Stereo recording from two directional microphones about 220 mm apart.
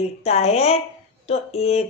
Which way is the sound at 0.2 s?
30° left (ahead or behind).